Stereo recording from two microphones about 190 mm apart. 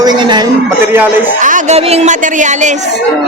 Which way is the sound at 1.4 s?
45° right (ahead or behind).